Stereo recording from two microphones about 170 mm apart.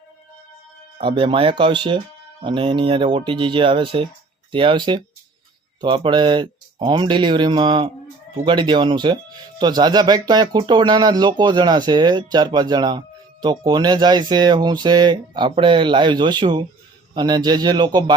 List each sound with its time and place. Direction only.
0.9 s speech: 30° right (ahead or behind)